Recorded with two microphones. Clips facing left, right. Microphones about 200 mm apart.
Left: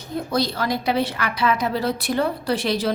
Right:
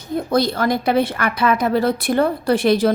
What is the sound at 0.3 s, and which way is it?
A woman's voice, 50° right (ahead or behind).